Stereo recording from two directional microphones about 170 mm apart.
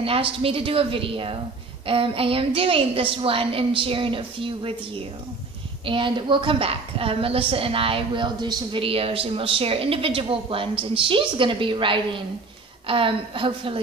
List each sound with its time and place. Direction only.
0.0 s a woman's voice: 35° right (ahead or behind)